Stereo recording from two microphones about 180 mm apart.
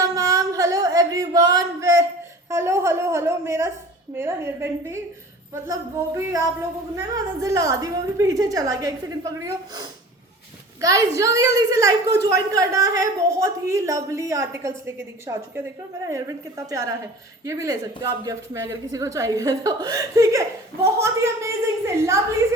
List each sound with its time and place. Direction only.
0.0 s a sound: 20° right (ahead or behind)
2.5 s a woman's voice: 15° right (ahead or behind)
6.0 s a woman's voice: 15° right (ahead or behind)